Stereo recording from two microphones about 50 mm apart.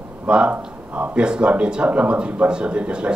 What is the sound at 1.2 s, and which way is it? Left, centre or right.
A man's voice, right.